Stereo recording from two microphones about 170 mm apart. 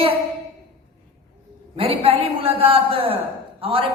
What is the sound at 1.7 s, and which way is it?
A woman's voice, 35° right (ahead or behind).